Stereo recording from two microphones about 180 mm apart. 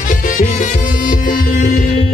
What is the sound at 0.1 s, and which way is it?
Music, 45° left (ahead or behind).